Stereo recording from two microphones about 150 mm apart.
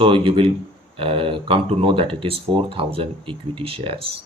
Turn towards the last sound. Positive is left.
turn(degrees=-35)  # may be behind; listen again after turning